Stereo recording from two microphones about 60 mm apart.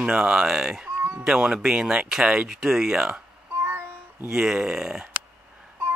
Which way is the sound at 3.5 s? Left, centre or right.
Right.